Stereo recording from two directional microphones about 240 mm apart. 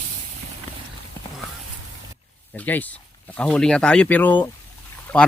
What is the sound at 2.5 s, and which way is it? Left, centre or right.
Speech, centre.